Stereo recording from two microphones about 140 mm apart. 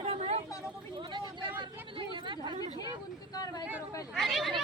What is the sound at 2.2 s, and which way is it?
Speech, 35° right (ahead or behind).